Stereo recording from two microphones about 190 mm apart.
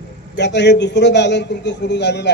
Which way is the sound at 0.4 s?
65° left (ahead or behind).